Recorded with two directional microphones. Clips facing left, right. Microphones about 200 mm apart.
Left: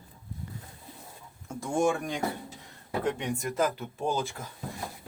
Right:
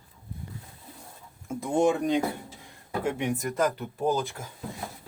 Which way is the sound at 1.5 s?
20° right (ahead or behind).